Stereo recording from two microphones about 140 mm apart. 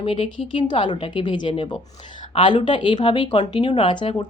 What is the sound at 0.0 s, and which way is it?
Speech, 40° left (ahead or behind).